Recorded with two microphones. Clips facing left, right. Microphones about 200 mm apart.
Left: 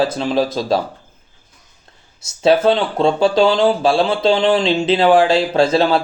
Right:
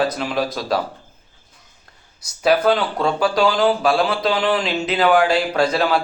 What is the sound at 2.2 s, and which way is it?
Speech, 25° left (ahead or behind).